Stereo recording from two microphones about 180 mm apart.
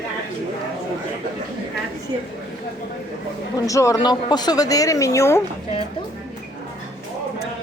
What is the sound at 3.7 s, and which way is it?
Speech, 15° left (ahead or behind).